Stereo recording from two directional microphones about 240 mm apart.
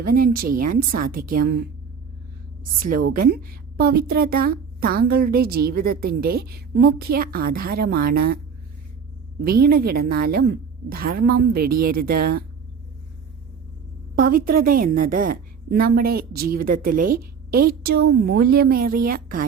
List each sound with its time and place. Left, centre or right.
0.0 s a woman's voice: right
2.8 s a woman's voice: right
9.4 s a woman's voice: right
14.2 s a woman's voice: right